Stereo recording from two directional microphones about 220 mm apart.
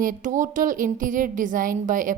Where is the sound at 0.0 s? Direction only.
35° right (ahead or behind).